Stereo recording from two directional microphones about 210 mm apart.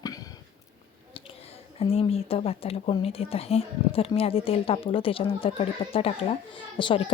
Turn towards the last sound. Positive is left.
turn(degrees=25)  # may be behind; listen again after turning